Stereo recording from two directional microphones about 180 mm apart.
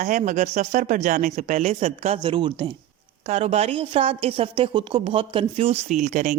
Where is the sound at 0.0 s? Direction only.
45° right (ahead or behind).